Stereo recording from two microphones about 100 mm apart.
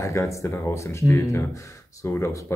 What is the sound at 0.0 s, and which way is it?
Speech, 30° left (ahead or behind).